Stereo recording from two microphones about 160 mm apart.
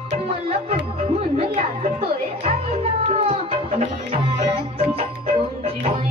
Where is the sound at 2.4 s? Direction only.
40° right (ahead or behind).